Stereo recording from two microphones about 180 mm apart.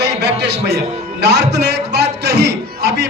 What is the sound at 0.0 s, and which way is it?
Music, 70° right (ahead or behind).